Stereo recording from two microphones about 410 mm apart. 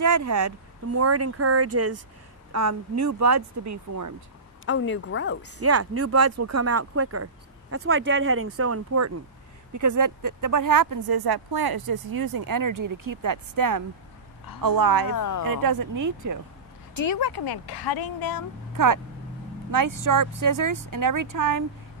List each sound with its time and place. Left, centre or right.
0.0 s speech: right
4.6 s a woman's voice: left
5.6 s a woman's voice: right
15.0 s speech: left
15.4 s speech: right
17.1 s speech: left
19.7 s speech: right